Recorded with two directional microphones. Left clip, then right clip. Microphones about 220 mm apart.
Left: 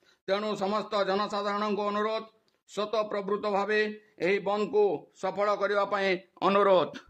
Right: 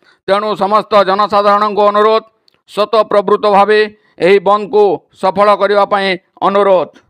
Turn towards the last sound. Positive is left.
turn(degrees=-30)  # may be behind; listen again after turning